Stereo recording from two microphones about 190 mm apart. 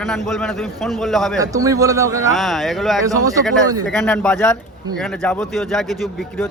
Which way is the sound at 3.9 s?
5° left (ahead or behind).